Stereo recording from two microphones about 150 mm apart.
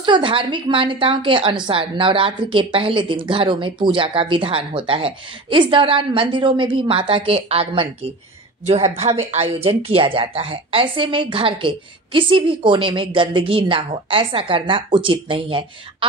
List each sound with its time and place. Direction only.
0.0 s a woman's voice: 35° right (ahead or behind)